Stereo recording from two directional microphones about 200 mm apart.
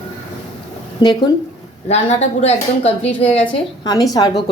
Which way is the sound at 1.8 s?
35° left (ahead or behind).